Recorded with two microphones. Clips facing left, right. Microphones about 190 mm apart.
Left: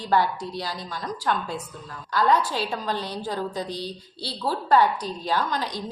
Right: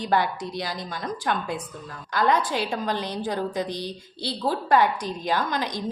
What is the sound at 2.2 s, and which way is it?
A woman's voice, 20° right (ahead or behind).